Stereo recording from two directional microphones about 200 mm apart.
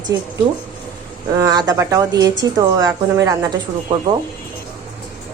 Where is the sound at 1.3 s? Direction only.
20° right (ahead or behind).